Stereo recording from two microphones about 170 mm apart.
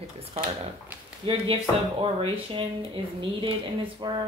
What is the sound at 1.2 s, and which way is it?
Speech, 30° right (ahead or behind).